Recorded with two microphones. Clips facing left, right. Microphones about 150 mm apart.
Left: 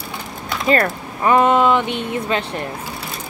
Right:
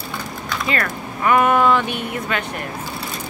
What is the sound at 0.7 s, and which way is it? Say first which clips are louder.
Speech: left 8 dB; 30° left (ahead or behind).